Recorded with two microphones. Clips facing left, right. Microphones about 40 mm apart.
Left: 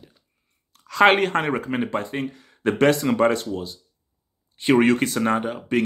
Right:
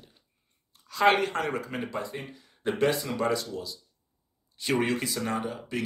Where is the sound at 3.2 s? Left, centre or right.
Left.